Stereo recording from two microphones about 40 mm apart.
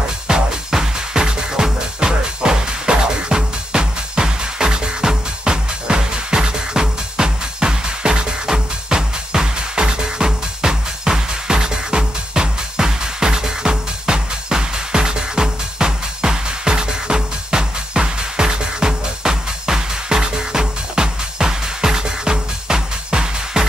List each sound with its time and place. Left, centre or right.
0.3 s music: centre